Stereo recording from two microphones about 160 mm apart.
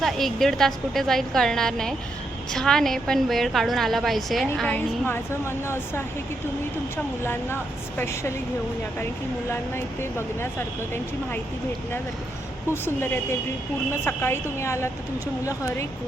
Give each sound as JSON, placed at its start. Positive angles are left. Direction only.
{"t": 0.0, "sound": "a woman's voice", "side_deg": 0}
{"t": 5.0, "sound": "a woman's voice", "side_deg": 15}
{"t": 9.5, "sound": "a woman's voice", "side_deg": 15}
{"t": 14.0, "sound": "a woman's voice", "side_deg": 15}